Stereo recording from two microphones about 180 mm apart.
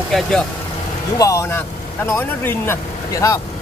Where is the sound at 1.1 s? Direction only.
15° left (ahead or behind).